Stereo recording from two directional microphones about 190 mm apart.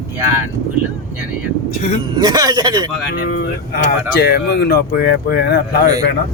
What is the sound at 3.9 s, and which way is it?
Speech, 55° left (ahead or behind).